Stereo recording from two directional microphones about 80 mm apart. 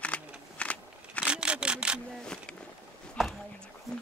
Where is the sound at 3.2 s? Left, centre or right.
Centre.